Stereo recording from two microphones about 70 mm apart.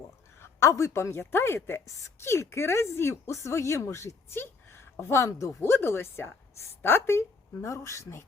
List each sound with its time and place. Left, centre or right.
0.4 s speech: left